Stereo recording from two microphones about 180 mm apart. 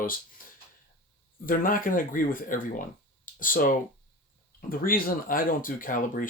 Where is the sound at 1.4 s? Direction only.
50° left (ahead or behind).